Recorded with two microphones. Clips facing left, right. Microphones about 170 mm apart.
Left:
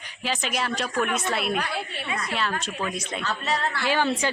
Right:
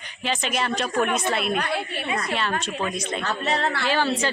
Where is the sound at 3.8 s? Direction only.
15° left (ahead or behind).